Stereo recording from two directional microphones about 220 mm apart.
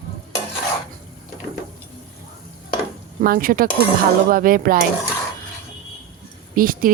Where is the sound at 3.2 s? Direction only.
40° right (ahead or behind).